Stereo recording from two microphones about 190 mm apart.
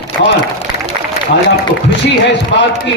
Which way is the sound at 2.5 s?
65° left (ahead or behind).